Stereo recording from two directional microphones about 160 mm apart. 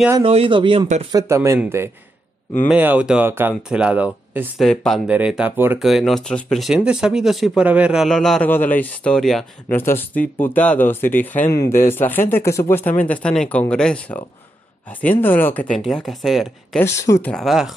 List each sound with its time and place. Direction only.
0.2 s speech: 35° right (ahead or behind)
1.1 s speech: 15° right (ahead or behind)
4.6 s speech: centre (ahead or behind)
16.8 s speech: 20° left (ahead or behind)
17.3 s speech: centre (ahead or behind)